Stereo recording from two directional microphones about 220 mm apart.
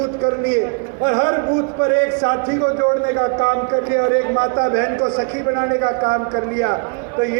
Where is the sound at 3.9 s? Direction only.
50° right (ahead or behind).